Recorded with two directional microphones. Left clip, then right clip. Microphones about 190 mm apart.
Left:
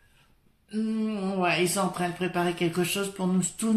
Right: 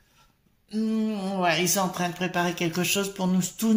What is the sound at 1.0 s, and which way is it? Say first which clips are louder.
Speech: right 1 dB; 30° right (ahead or behind).